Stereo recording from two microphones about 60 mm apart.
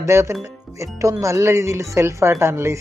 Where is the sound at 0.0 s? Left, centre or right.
Right.